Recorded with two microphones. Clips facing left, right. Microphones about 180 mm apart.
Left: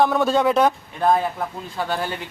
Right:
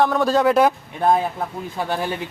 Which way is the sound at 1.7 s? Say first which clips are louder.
Right 1 dB; 15° right (ahead or behind).